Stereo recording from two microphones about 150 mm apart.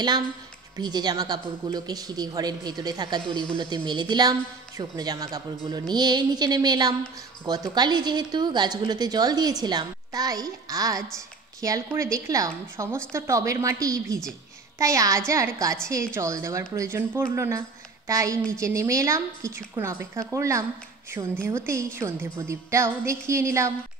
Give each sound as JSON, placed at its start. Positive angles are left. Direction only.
{"t": 0.7, "sound": "a woman's voice", "side_deg": -25}